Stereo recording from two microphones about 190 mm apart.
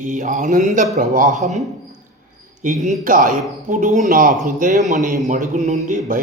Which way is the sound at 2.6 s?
40° right (ahead or behind).